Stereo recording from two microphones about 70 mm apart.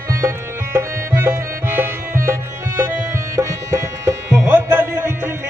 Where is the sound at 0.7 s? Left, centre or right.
Right.